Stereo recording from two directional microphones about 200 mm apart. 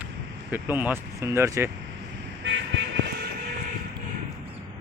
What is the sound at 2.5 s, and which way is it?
Vehicle, 65° right (ahead or behind).